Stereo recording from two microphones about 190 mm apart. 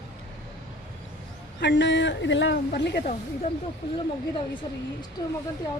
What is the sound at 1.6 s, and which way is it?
Speech, 65° left (ahead or behind).